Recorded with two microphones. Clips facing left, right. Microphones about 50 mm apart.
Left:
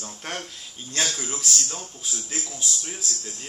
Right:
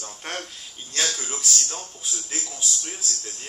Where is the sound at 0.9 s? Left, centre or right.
Left.